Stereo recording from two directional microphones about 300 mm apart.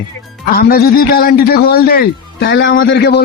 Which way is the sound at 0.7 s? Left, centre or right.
Left.